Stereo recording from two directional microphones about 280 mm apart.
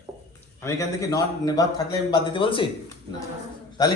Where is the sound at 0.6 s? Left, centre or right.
Centre.